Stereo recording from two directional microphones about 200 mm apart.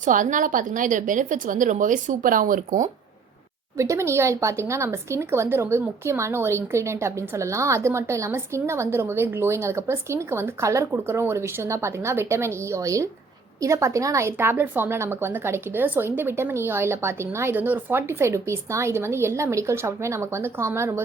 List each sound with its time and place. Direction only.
0.0 s a woman's voice: 40° right (ahead or behind)
3.8 s speech: 15° right (ahead or behind)